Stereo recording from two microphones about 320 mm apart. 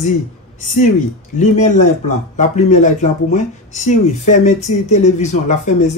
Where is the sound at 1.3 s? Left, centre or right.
Left.